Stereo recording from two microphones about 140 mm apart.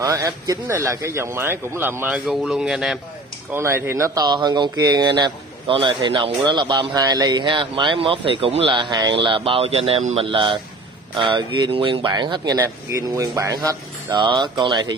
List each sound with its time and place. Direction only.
0.0 s a man's voice: 25° right (ahead or behind); by 3.0 s centre (ahead or behind)
3.5 s speech: 15° right (ahead or behind)